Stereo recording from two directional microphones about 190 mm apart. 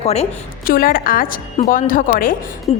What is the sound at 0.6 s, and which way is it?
A woman's voice, 50° left (ahead or behind).